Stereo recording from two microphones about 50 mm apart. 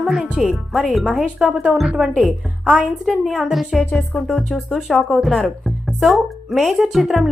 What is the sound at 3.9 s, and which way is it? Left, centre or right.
Speech, centre.